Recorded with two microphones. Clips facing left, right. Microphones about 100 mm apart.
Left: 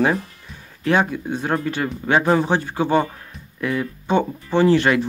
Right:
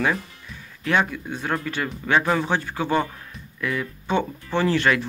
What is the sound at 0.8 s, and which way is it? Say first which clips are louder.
Speech: left 4 dB; 30° left (ahead or behind).